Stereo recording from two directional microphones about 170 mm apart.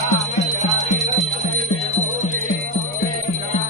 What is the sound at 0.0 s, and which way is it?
Music, 45° left (ahead or behind).